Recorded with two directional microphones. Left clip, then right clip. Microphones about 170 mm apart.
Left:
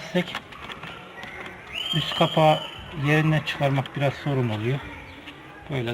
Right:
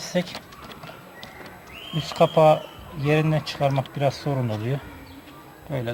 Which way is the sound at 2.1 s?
35° right (ahead or behind).